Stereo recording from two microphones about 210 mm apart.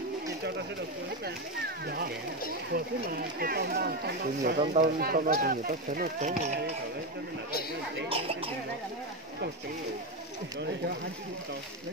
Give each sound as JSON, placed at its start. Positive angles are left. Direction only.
{"t": 2.7, "sound": "speech", "side_deg": -45}
{"t": 4.6, "sound": "speech", "side_deg": -35}
{"t": 5.0, "sound": "speech", "side_deg": -45}